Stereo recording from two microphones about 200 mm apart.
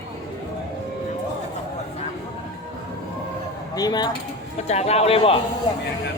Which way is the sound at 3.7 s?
20° left (ahead or behind).